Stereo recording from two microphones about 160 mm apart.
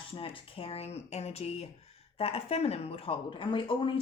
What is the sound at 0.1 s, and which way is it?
A woman's voice, 35° left (ahead or behind).